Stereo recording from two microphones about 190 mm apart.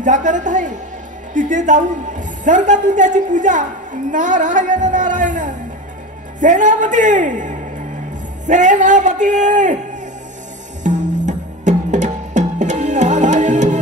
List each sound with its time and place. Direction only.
0.0 s a man's voice: 40° right (ahead or behind)
10.8 s music: 40° right (ahead or behind)